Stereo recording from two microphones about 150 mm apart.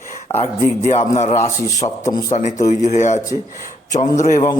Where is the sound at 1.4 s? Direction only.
20° left (ahead or behind).